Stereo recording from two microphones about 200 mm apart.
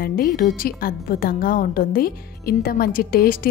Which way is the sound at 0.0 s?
45° left (ahead or behind).